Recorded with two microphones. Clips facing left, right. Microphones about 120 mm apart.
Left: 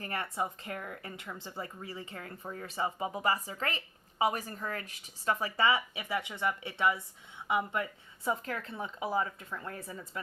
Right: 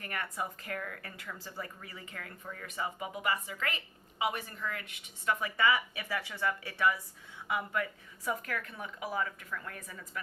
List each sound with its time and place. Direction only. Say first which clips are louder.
0.0 s speech: left 3 dB; 30° left (ahead or behind)